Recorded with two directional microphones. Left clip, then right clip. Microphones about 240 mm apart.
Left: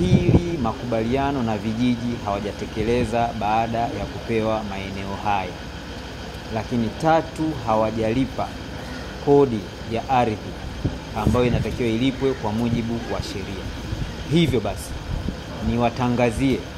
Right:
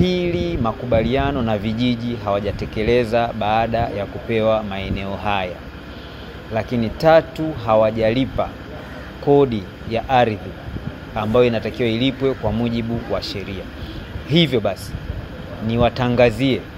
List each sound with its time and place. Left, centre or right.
0.0 s speech: right
6.5 s speech: right
9.9 s speech: right
15.7 s speech: right